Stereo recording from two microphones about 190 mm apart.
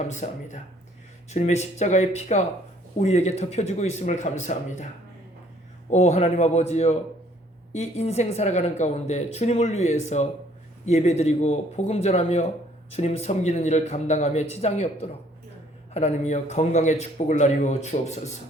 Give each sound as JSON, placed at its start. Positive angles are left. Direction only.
{"t": 0.1, "sound": "speech", "side_deg": 40}
{"t": 5.9, "sound": "speech", "side_deg": 35}